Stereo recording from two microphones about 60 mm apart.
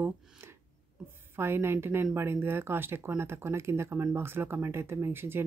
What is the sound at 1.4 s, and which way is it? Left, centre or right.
Speech, right.